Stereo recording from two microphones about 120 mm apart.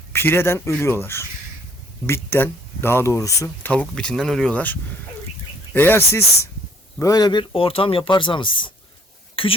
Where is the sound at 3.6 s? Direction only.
10° left (ahead or behind).